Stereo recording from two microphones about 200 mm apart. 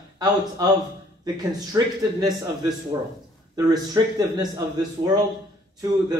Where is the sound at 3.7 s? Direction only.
20° right (ahead or behind).